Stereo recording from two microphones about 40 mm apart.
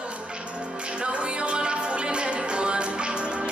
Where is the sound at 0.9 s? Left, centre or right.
Right.